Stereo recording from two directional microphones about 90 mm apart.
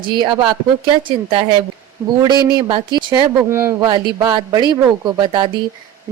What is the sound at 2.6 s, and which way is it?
Speech, 60° right (ahead or behind).